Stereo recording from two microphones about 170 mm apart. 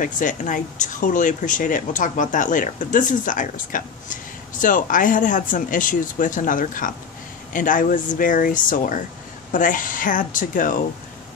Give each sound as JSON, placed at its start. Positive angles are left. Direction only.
{"t": 0.0, "sound": "speech", "side_deg": 50}